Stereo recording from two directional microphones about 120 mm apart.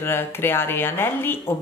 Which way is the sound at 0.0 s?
20° left (ahead or behind).